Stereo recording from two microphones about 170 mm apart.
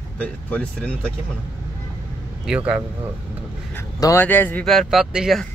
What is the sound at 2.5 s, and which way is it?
Speech, 5° right (ahead or behind).